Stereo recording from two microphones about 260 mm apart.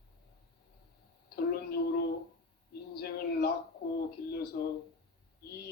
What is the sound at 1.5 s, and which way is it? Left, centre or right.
Speech, left.